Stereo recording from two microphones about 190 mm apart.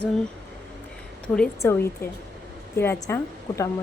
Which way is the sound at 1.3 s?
10° left (ahead or behind).